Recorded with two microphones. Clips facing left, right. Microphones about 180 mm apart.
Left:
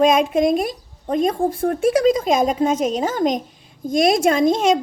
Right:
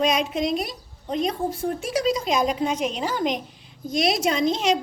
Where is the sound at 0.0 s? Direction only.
50° left (ahead or behind).